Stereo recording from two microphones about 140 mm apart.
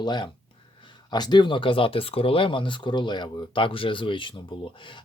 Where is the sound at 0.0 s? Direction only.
30° left (ahead or behind).